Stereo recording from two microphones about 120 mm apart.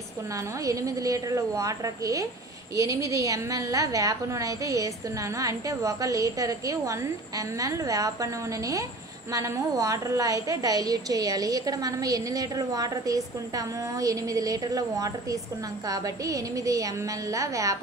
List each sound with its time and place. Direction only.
0.7 s a woman's voice: 30° right (ahead or behind)